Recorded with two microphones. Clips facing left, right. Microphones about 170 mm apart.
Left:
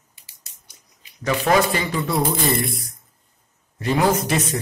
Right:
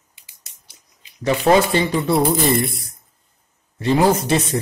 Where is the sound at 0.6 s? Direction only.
30° right (ahead or behind).